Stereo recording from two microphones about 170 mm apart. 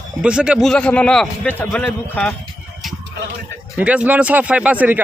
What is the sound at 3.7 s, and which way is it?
Speech, 10° right (ahead or behind).